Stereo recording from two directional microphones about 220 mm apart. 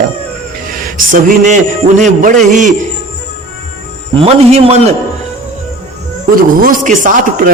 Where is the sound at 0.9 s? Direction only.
35° right (ahead or behind).